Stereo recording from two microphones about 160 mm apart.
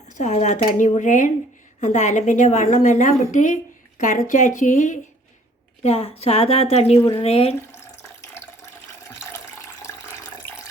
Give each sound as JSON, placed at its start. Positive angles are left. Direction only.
{"t": 0.1, "sound": "a woman's voice", "side_deg": 45}
{"t": 5.8, "sound": "a woman's voice", "side_deg": 40}
{"t": 10.4, "sound": "water tap", "side_deg": 15}